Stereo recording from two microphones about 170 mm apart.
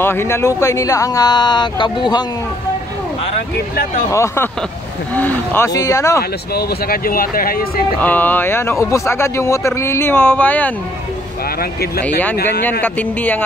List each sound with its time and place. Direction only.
0.0 s speech: 15° left (ahead or behind)
4.1 s speech: 15° left (ahead or behind)
6.5 s speech: 65° left (ahead or behind)
8.0 s speech: 10° left (ahead or behind)
12.8 s speech: 10° left (ahead or behind)